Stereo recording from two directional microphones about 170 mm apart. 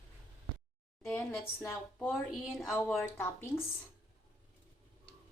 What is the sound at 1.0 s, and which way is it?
Speech, 10° left (ahead or behind).